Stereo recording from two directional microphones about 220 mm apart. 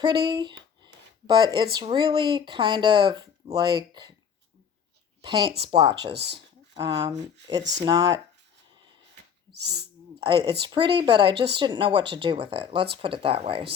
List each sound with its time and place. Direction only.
0.0 s speech: 20° right (ahead or behind)
5.2 s speech: 20° right (ahead or behind)
6.1 s speech: 50° right (ahead or behind)
6.7 s speech: 20° right (ahead or behind)
9.5 s speech: 50° right (ahead or behind)
10.2 s speech: 20° right (ahead or behind)